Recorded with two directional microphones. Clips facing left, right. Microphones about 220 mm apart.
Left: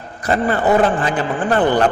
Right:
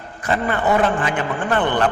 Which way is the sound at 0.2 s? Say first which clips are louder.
Left 4 dB; 35° left (ahead or behind).